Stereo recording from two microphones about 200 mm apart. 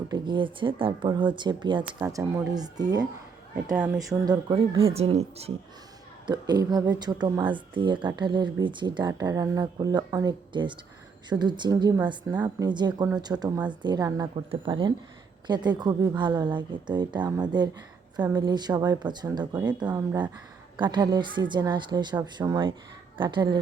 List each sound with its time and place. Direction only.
0.1 s speech: 25° right (ahead or behind)
1.8 s speech: 10° right (ahead or behind)
2.6 s speech: 20° right (ahead or behind)
6.2 s speech: 20° right (ahead or behind)